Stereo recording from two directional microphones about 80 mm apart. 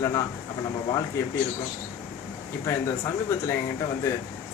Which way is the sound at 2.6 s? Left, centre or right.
Left.